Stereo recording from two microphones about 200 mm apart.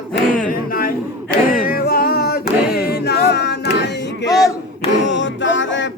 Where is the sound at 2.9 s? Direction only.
50° left (ahead or behind).